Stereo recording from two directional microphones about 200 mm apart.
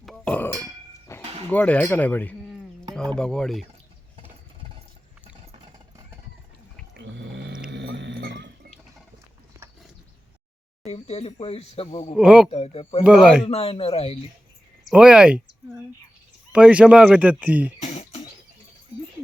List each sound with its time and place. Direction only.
0.0 s burping: 5° left (ahead or behind)
1.2 s a sound: 30° right (ahead or behind)
1.5 s speech: 10° left (ahead or behind)
6.9 s roaring cats: 60° right (ahead or behind)
7.7 s dog: 65° right (ahead or behind)
10.8 s speech: 30° left (ahead or behind)
12.1 s speech: 5° right (ahead or behind)
12.5 s speech: 30° left (ahead or behind)
13.1 s speech: 5° right (ahead or behind)
13.4 s speech: 30° left (ahead or behind)
14.8 s speech: 5° right (ahead or behind)
16.5 s speech: 5° right (ahead or behind)
17.8 s music: 30° left (ahead or behind)